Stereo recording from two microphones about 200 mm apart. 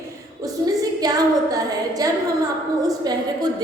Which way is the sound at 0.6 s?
20° right (ahead or behind).